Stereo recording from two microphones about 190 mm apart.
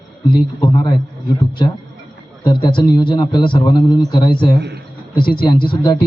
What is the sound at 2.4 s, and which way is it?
A man's voice, 25° left (ahead or behind).